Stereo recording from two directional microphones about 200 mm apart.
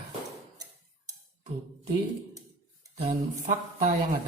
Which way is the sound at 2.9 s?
30° right (ahead or behind).